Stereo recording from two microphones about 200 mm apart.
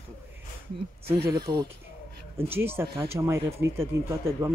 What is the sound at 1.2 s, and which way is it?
Speech, 20° right (ahead or behind).